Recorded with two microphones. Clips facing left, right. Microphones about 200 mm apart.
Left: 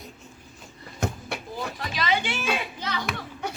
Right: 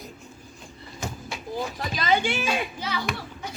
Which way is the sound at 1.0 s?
60° left (ahead or behind).